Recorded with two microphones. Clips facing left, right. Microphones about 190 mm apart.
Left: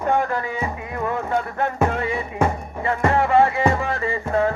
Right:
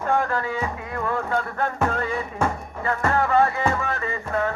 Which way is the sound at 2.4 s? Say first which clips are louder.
Left 4 dB; 25° left (ahead or behind).